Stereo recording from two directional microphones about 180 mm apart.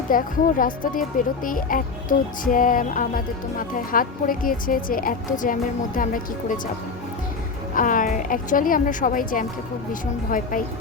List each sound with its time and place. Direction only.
0.1 s music: 50° left (ahead or behind)
7.8 s music: 50° left (ahead or behind)